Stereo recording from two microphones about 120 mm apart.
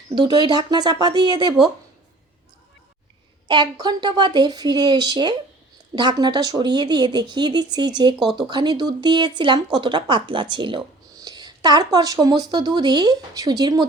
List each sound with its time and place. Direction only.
0.1 s speech: 40° right (ahead or behind)
3.5 s speech: 35° right (ahead or behind)